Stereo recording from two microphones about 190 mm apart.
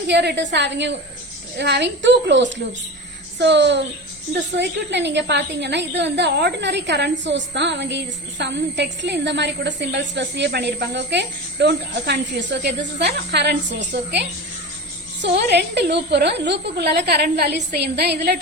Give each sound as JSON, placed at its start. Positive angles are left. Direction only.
{"t": 0.1, "sound": "a woman's voice", "side_deg": -65}